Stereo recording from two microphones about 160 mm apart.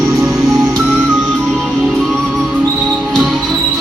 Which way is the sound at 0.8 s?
5° right (ahead or behind).